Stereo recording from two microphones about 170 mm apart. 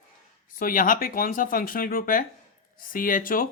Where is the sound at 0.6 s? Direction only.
55° left (ahead or behind).